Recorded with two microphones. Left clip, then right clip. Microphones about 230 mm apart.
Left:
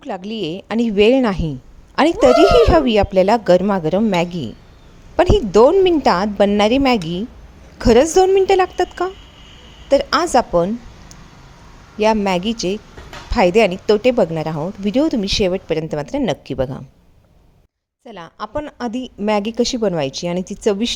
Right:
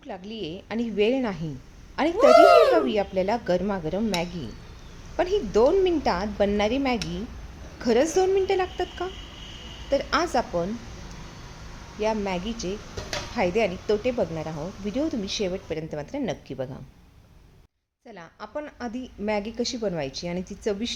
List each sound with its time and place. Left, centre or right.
0.0 s a woman's voice: left
2.1 s speech: centre
2.7 s a woman's voice: left
11.9 s a woman's voice: left
18.1 s a woman's voice: left